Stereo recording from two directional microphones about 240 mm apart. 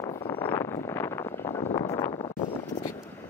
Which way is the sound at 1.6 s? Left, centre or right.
Left.